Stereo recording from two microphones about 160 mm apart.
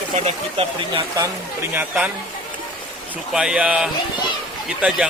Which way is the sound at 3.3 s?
5° right (ahead or behind).